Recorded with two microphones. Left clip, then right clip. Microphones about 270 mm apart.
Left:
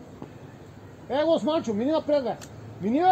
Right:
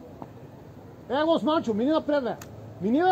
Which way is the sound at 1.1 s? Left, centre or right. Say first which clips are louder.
Even; right.